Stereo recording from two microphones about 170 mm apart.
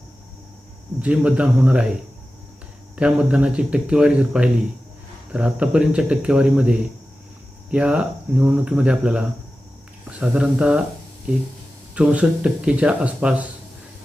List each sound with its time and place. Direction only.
1.0 s speech: 5° right (ahead or behind)
2.9 s speech: 5° right (ahead or behind)
11.9 s speech: 5° right (ahead or behind)